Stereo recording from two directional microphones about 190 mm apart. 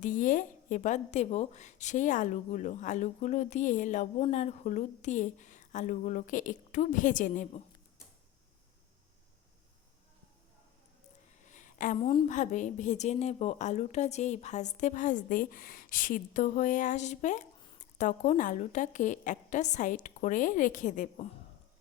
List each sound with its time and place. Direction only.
0.0 s a woman's voice: 40° left (ahead or behind)
11.4 s a sound: 40° left (ahead or behind)
12.3 s a woman's voice: 40° left (ahead or behind)